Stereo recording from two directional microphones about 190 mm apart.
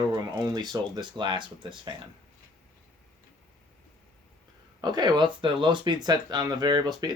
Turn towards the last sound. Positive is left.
turn(degrees=-20)  # may be behind; listen again after turning